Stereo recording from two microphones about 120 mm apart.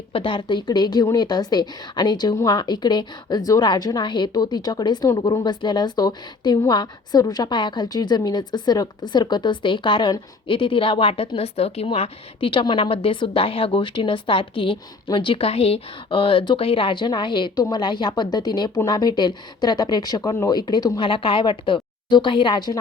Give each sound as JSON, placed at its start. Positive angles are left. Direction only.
{"t": 0.1, "sound": "a woman's voice", "side_deg": 45}
{"t": 21.0, "sound": "a woman's voice", "side_deg": 45}